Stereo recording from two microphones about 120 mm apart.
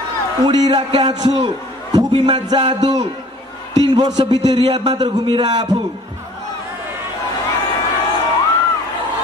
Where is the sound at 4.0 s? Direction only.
35° right (ahead or behind).